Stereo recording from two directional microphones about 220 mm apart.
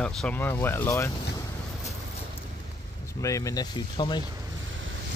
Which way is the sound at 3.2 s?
15° left (ahead or behind).